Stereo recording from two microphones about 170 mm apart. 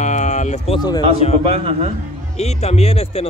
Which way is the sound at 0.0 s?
45° left (ahead or behind).